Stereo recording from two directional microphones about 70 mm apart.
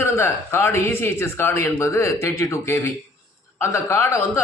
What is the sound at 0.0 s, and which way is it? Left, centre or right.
A woman's voice, left.